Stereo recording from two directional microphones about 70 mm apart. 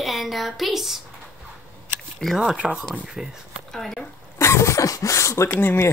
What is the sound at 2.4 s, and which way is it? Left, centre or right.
Speech, centre.